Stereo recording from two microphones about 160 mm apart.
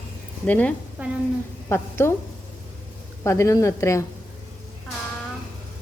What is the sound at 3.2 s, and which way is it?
Speech, 15° left (ahead or behind).